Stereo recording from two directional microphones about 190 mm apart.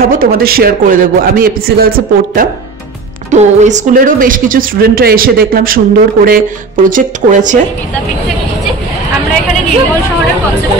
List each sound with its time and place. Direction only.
0.0 s a woman's voice: 50° right (ahead or behind)
3.3 s a woman's voice: 40° right (ahead or behind)